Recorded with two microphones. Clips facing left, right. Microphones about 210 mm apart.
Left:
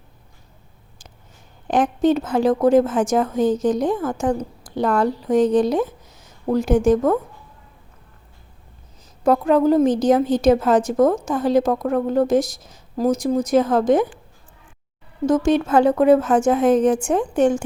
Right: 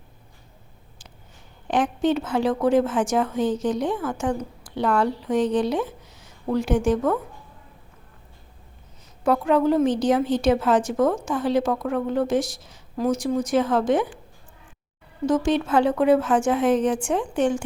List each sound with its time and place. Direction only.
1.6 s a woman's voice: 45° left (ahead or behind)
9.2 s a woman's voice: 40° left (ahead or behind)
15.3 s a woman's voice: 45° left (ahead or behind)